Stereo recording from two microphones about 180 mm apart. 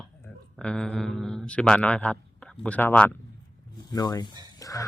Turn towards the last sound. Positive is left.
turn(degrees=20)  # may be behind; listen again after turning